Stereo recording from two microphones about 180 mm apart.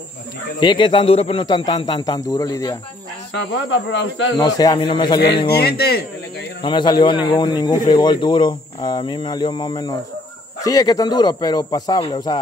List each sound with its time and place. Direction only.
0.6 s a man's voice: 25° left (ahead or behind)
3.3 s speech: 85° left
4.4 s a man's voice: 20° left (ahead or behind)
5.5 s speech: 65° left (ahead or behind)
6.6 s a man's voice: 25° left (ahead or behind)